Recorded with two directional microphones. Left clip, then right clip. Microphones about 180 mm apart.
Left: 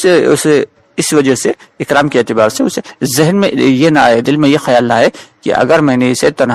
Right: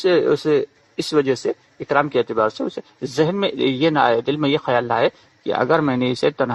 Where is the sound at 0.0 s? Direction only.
45° left (ahead or behind).